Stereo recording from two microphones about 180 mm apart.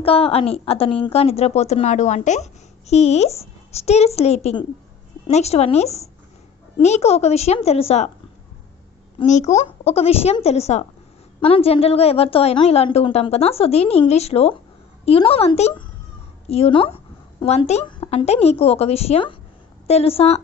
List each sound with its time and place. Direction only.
0.0 s a woman's voice: 30° left (ahead or behind)
9.2 s a woman's voice: 40° left (ahead or behind)